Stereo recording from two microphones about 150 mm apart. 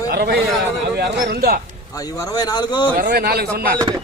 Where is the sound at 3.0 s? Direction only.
80° right.